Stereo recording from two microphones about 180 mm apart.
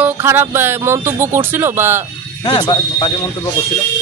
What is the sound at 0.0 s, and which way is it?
Speech, 10° right (ahead or behind).